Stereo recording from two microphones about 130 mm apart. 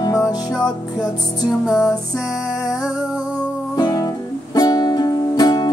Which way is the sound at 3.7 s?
30° left (ahead or behind).